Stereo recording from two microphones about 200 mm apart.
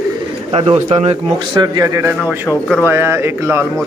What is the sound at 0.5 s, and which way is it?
A man's voice, 30° right (ahead or behind).